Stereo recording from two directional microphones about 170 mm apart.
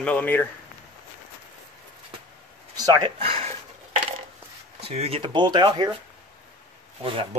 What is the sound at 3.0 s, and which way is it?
Speech, 35° right (ahead or behind).